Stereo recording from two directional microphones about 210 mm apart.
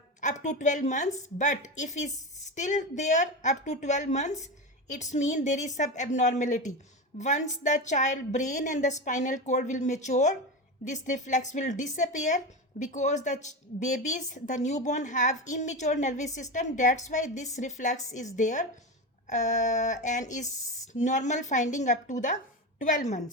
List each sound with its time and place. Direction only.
0.2 s a woman's voice: 35° left (ahead or behind)